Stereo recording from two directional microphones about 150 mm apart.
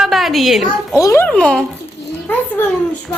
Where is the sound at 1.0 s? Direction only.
20° left (ahead or behind).